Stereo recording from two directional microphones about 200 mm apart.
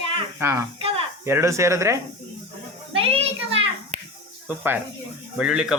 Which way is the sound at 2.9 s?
30° right (ahead or behind).